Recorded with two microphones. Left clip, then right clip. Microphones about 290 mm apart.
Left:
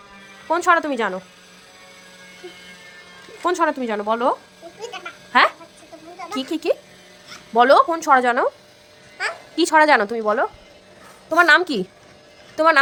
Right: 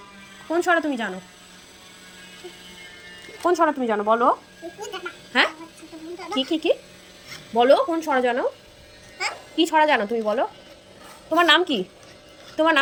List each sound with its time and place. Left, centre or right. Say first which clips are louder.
0.6 s speech: left 4 dB; centre
3.5 s speech: right 1 dB; centre
4.8 s sheep: left 1 dB; centre
6.1 s speech: right 2 dB; centre
6.5 s speech: left 1 dB; left
7.5 s a child's voice: left 4 dB; centre